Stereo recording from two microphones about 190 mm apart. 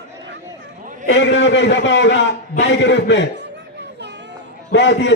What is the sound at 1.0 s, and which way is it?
A man's voice, 70° left (ahead or behind).